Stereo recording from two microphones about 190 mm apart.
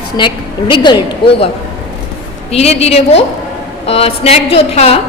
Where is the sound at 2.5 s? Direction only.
35° left (ahead or behind).